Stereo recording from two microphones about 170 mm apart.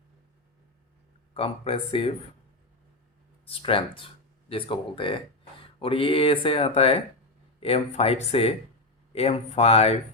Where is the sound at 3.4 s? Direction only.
30° left (ahead or behind).